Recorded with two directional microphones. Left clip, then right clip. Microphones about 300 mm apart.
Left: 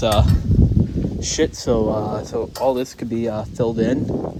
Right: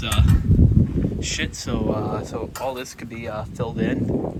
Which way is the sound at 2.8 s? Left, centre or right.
Left.